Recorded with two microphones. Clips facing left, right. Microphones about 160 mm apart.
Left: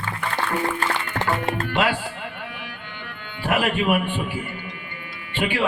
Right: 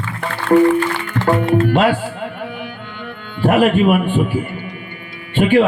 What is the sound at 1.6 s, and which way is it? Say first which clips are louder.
Music: right 6 dB; 45° right (ahead or behind).